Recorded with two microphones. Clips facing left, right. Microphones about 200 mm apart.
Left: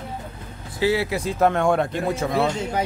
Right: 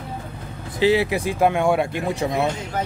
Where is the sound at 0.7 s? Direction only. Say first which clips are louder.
Right 3 dB; 20° right (ahead or behind).